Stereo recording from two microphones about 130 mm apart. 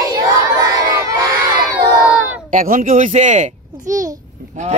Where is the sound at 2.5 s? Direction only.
90° right.